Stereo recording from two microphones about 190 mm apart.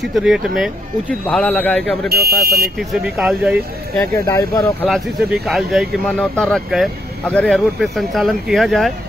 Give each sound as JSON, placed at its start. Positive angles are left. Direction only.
{"t": 0.0, "sound": "speech", "side_deg": 0}
{"t": 2.0, "sound": "speech", "side_deg": -55}
{"t": 2.9, "sound": "speech", "side_deg": 0}
{"t": 4.3, "sound": "speech", "side_deg": 15}
{"t": 4.8, "sound": "speech", "side_deg": 0}